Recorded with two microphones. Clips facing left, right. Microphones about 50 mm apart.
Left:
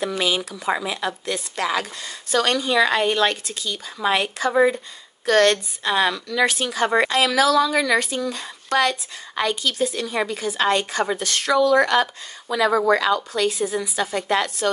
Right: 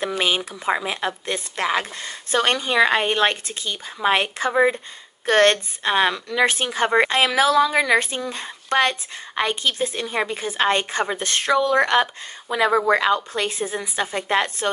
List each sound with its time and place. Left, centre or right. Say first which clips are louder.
0.5 s speech: right 1 dB; right